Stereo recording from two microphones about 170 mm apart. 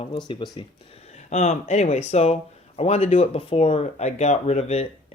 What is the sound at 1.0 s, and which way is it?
Speech, 40° left (ahead or behind).